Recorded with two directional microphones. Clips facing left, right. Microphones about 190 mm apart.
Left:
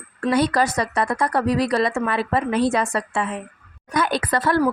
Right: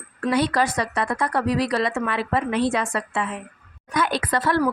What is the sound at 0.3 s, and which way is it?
A woman's voice, 45° left (ahead or behind).